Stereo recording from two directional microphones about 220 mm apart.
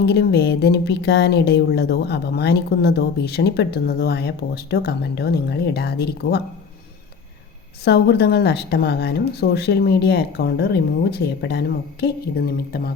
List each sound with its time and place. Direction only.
0.0 s speech: 50° left (ahead or behind)
7.9 s speech: 50° left (ahead or behind)